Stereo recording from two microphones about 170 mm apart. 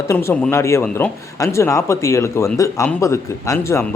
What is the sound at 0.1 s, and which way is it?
Speech, 15° left (ahead or behind).